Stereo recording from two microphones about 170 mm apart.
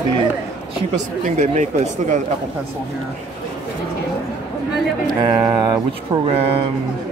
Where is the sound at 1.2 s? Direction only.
45° right (ahead or behind).